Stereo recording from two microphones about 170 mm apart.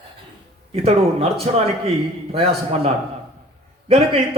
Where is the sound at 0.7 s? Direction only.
35° right (ahead or behind).